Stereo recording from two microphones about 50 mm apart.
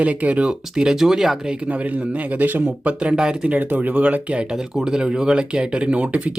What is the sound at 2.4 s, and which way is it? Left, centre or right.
Speech, right.